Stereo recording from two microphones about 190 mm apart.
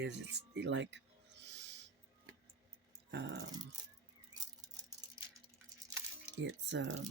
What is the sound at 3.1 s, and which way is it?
Speech, 65° right (ahead or behind).